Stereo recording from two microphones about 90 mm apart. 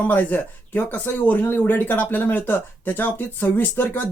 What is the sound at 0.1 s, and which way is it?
Speech, 20° left (ahead or behind).